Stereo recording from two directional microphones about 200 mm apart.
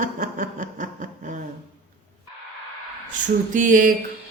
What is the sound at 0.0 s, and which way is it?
Speech, 40° right (ahead or behind).